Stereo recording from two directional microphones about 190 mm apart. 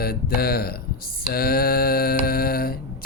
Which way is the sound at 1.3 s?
55° left (ahead or behind).